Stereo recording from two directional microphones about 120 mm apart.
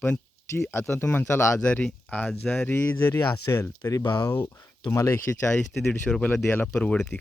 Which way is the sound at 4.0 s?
35° left (ahead or behind).